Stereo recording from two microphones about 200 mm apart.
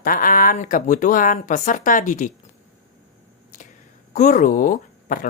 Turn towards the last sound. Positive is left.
turn(degrees=40)  # may be behind; listen again after turning